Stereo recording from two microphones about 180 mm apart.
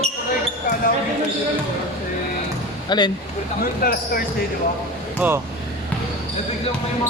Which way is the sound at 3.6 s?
55° left (ahead or behind).